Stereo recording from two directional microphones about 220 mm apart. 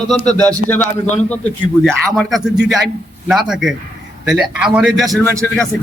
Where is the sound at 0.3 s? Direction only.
15° right (ahead or behind).